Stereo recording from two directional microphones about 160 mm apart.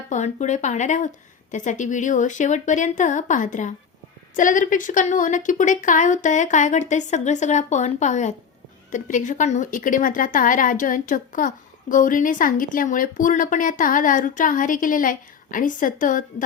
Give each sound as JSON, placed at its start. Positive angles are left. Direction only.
{"t": 0.1, "sound": "a woman's voice", "side_deg": 50}